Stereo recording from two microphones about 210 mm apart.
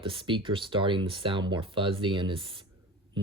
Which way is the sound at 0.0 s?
25° right (ahead or behind).